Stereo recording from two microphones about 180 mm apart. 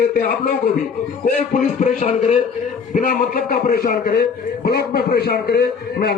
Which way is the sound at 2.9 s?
50° left (ahead or behind).